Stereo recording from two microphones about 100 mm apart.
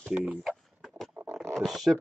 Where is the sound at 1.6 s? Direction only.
Centre (ahead or behind).